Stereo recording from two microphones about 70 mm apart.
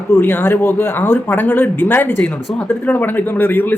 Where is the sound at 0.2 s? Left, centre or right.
Left.